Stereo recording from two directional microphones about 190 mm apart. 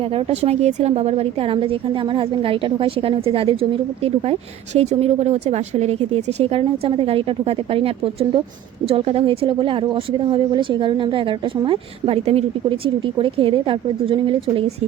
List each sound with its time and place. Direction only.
0.0 s a woman's voice: 30° right (ahead or behind)